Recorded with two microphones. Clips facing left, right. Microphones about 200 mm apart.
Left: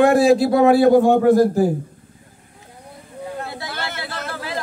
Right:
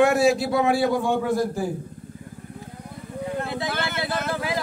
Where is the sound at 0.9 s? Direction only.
40° left (ahead or behind).